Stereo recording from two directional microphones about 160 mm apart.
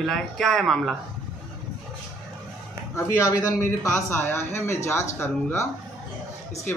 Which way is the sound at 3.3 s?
25° left (ahead or behind).